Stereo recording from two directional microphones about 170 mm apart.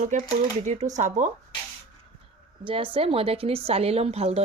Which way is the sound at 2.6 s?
30° right (ahead or behind).